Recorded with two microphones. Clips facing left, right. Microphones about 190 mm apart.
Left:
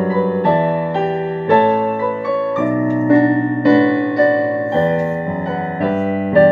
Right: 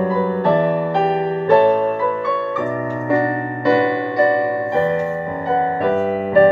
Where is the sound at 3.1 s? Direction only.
25° left (ahead or behind).